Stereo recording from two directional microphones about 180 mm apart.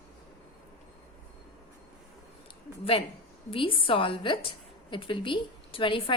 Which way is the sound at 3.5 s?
30° left (ahead or behind).